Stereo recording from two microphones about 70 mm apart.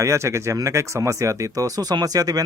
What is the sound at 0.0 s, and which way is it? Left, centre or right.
Speech, right.